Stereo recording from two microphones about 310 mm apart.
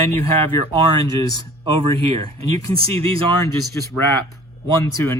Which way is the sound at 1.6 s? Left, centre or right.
Centre.